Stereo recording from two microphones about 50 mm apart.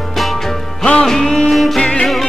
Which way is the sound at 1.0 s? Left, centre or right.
Centre.